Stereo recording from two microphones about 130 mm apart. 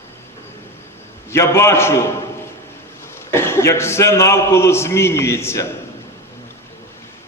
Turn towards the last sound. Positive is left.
turn(degrees=20)  # may be behind; listen again after turning